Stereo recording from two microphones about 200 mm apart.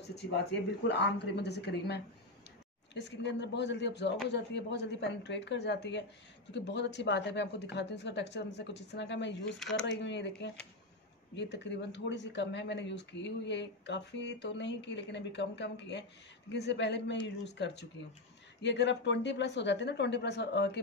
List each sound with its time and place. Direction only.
0.8 s speech: 55° left (ahead or behind)